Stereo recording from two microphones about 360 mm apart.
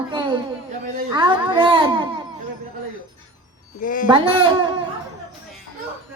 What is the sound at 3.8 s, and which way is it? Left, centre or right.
Speech, left.